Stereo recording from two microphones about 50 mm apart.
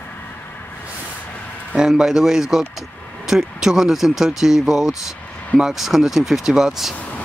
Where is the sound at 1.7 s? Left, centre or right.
Centre.